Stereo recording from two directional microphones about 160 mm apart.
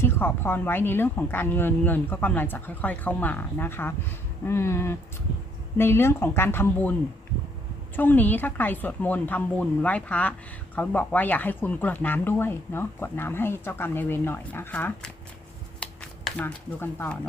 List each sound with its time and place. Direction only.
0.0 s speech: 15° left (ahead or behind)
7.9 s speech: 10° left (ahead or behind)
15.8 s a sound: 10° left (ahead or behind)